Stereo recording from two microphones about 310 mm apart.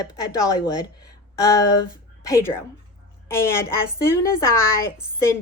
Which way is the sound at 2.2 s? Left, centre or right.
Centre.